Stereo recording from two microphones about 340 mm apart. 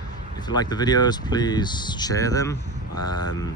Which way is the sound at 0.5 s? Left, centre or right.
Centre.